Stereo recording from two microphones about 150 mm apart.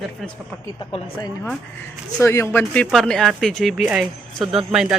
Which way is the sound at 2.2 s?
15° left (ahead or behind).